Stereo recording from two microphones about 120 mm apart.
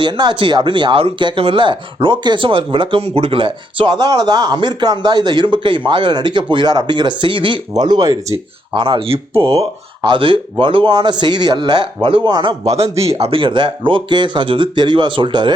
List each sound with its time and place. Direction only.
0.0 s speech: 40° right (ahead or behind)
8.7 s speech: 45° right (ahead or behind)
9.6 s speech: 40° right (ahead or behind)
12.7 s speech: 55° right (ahead or behind); by 15.5 s 40° right (ahead or behind)